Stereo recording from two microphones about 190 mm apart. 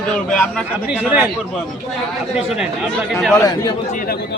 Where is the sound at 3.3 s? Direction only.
20° left (ahead or behind).